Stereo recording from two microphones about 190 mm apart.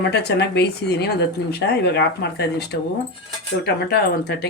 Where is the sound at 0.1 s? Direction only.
60° left (ahead or behind).